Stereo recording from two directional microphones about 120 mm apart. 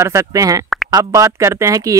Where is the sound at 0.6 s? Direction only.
Centre (ahead or behind).